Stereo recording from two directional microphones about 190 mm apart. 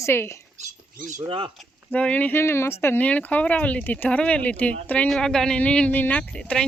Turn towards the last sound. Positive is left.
turn(degrees=5)  # may be behind; listen again after turning